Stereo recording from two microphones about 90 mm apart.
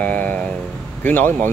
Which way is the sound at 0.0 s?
15° left (ahead or behind).